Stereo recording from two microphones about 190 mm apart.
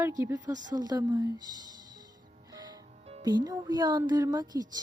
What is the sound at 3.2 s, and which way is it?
Speech, 20° right (ahead or behind).